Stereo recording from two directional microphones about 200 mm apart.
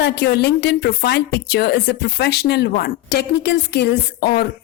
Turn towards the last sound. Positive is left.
turn(degrees=50)  # may be behind; listen again after turning